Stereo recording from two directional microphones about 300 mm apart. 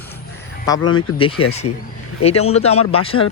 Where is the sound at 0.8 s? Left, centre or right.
Left.